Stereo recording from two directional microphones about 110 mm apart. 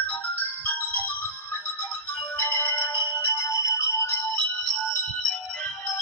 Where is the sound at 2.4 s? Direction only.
15° left (ahead or behind).